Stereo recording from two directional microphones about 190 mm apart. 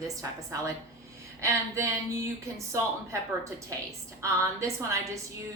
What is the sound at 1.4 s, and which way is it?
Speech, 15° right (ahead or behind).